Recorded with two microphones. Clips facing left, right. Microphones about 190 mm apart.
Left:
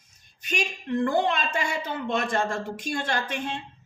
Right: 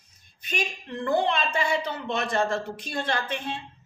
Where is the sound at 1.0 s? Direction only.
45° left (ahead or behind).